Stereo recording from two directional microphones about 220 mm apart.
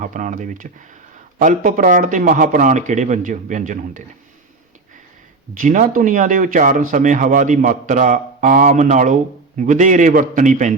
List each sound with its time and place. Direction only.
0.0 s a man's voice: 35° right (ahead or behind)
5.5 s a man's voice: 35° right (ahead or behind)